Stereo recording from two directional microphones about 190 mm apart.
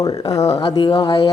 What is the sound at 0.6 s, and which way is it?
Speech, 30° left (ahead or behind).